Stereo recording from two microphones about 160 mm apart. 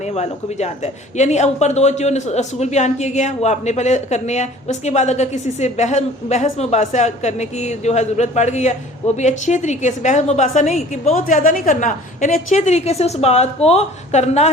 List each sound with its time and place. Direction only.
0.1 s a man's voice: 45° left (ahead or behind)